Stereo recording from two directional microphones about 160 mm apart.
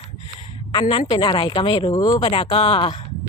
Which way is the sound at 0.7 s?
30° left (ahead or behind).